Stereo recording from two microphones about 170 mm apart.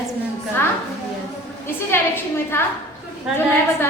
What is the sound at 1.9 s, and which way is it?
Speech, 15° left (ahead or behind).